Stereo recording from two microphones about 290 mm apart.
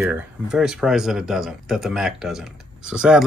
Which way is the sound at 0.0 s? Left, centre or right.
Centre.